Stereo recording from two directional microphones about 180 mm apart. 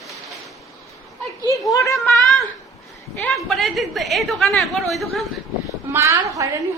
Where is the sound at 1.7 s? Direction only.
15° left (ahead or behind).